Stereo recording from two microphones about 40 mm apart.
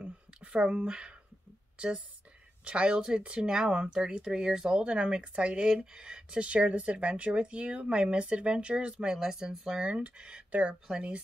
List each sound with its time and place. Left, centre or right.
0.0 s a sound: right
2.6 s speech: right
4.8 s speech: right
9.1 s speech: centre
9.8 s speech: right